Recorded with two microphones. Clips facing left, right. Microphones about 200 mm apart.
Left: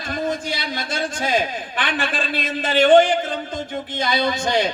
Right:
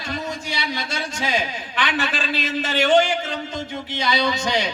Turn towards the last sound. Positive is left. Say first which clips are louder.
# left 2 dB
turn(degrees=50)  # may be behind; listen again after turning